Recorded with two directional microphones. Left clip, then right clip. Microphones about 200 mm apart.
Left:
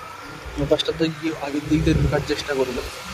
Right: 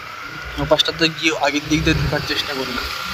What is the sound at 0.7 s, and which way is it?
Speech, 5° left (ahead or behind).